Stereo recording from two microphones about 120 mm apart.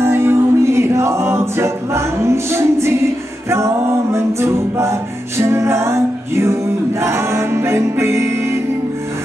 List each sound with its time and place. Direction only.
0.0 s music: 20° right (ahead or behind)